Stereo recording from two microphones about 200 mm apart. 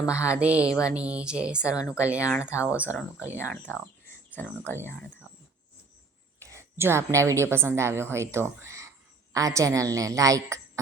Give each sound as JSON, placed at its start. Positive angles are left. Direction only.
{"t": 0.0, "sound": "a woman's voice", "side_deg": -5}
{"t": 2.9, "sound": "speech", "side_deg": 10}
{"t": 6.4, "sound": "a woman's voice", "side_deg": -15}